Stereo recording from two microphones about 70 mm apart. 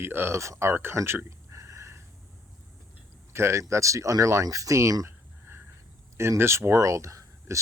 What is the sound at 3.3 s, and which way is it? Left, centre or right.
Speech, right.